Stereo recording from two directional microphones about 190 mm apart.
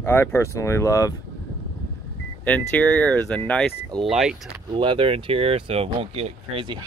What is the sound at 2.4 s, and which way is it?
Speech, 5° left (ahead or behind).